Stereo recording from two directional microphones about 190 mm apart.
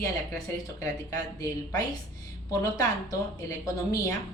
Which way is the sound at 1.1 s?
20° left (ahead or behind).